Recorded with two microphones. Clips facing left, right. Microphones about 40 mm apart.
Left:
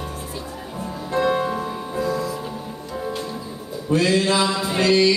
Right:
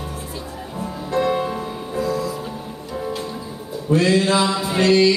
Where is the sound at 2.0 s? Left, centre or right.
Centre.